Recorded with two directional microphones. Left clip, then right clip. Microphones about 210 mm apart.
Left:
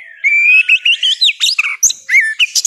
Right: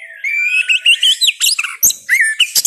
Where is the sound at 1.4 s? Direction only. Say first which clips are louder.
Left 3 dB; 20° left (ahead or behind).